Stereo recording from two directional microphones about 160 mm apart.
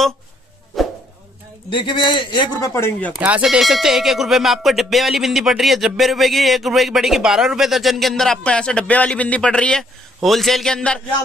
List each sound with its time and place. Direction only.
0.7 s a sound: centre (ahead or behind)
1.7 s a man's voice: 30° left (ahead or behind)
3.1 s speech: 10° right (ahead or behind)